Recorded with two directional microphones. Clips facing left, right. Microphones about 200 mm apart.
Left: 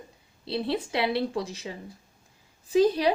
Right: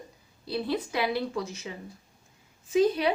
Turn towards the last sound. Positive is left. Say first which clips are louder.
# left 2 dB
turn(degrees=35)  # may be behind; listen again after turning